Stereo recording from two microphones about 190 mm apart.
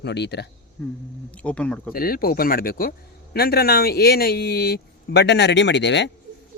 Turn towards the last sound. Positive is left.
turn(degrees=70)  # may be behind; listen again after turning